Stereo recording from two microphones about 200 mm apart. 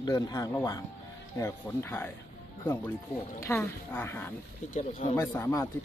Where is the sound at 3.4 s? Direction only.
10° left (ahead or behind).